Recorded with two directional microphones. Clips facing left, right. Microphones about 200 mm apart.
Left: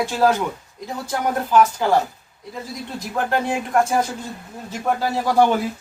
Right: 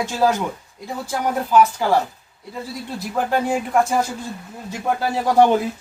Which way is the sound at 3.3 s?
10° right (ahead or behind).